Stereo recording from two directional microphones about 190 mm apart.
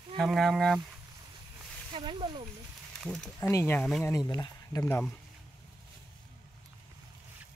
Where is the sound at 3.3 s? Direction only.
15° left (ahead or behind).